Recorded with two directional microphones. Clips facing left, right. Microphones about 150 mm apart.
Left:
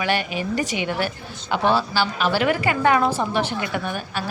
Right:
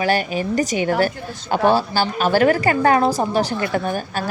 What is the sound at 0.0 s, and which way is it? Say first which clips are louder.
Speech: right 4 dB; 40° right (ahead or behind).